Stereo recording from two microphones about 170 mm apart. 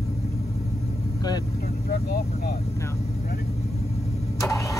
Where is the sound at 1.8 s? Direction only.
65° left (ahead or behind).